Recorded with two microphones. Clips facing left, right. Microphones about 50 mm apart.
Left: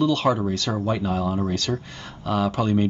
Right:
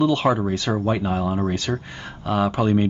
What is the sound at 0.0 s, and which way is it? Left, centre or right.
Speech, right.